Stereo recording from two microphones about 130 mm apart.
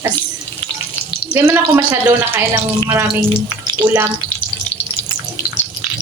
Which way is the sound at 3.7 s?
15° right (ahead or behind).